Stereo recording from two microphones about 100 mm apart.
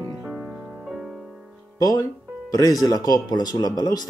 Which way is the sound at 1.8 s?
40° left (ahead or behind).